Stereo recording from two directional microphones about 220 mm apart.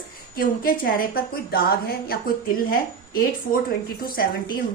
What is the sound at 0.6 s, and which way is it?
A woman's voice, 40° left (ahead or behind).